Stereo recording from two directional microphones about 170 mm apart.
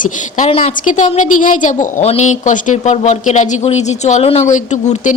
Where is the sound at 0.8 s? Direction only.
45° left (ahead or behind).